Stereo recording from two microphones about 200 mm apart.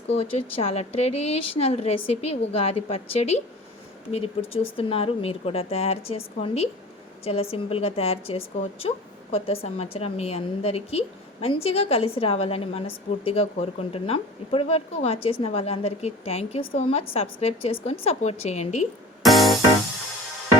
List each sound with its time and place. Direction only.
0.1 s a woman's voice: 30° left (ahead or behind)
19.2 s music: centre (ahead or behind)